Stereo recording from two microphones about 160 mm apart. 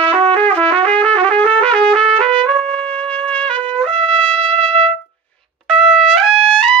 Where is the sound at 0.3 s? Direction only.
10° left (ahead or behind).